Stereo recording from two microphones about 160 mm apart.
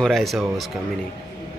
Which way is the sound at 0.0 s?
Centre (ahead or behind).